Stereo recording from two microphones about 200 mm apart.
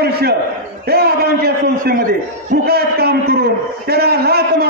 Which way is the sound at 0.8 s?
50° right (ahead or behind).